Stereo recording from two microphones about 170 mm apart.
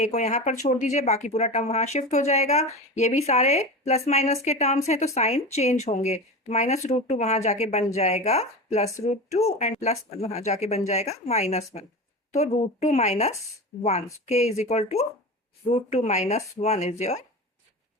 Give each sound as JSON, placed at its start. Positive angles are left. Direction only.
{"t": 0.0, "sound": "a woman's voice", "side_deg": 45}